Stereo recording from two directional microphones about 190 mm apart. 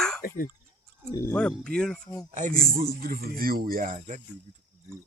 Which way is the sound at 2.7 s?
50° right (ahead or behind).